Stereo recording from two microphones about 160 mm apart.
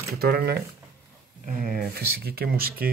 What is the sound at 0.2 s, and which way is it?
Speech, 70° right (ahead or behind).